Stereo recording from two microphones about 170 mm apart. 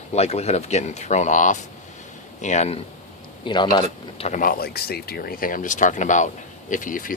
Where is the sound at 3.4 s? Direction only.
25° left (ahead or behind).